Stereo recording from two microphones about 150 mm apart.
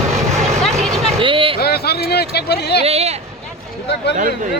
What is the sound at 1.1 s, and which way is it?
Vehicle, 35° right (ahead or behind).